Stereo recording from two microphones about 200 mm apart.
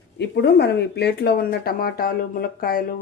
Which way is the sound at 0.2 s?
60° left (ahead or behind).